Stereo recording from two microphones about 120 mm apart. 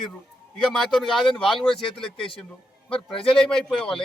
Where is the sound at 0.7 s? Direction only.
Centre (ahead or behind).